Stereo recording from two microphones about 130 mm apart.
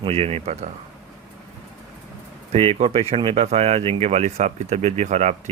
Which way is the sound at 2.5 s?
50° right (ahead or behind).